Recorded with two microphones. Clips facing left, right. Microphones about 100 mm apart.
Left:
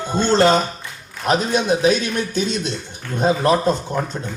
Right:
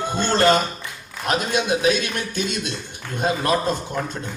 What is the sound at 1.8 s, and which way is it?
Speech, 20° left (ahead or behind).